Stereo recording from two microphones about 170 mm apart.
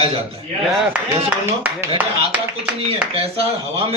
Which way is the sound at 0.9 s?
10° right (ahead or behind).